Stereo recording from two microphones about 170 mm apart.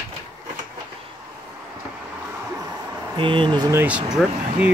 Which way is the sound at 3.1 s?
30° right (ahead or behind).